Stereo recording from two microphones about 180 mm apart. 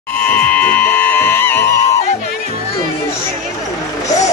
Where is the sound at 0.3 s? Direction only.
10° left (ahead or behind).